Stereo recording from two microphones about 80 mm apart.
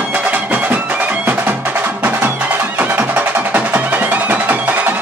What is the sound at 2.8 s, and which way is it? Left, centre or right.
Music, right.